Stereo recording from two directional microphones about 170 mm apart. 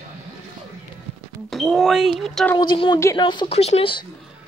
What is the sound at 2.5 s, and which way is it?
Speech, 25° left (ahead or behind).